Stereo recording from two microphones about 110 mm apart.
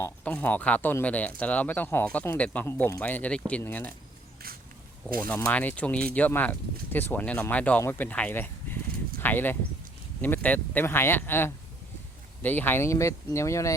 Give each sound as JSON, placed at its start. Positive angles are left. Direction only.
{"t": 0.3, "sound": "speech", "side_deg": 15}
{"t": 5.5, "sound": "speech", "side_deg": 15}